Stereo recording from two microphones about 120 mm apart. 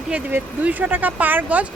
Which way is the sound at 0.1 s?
15° right (ahead or behind).